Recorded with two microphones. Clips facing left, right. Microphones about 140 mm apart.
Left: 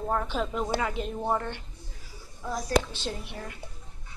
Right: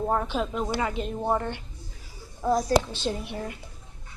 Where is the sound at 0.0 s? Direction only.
15° right (ahead or behind).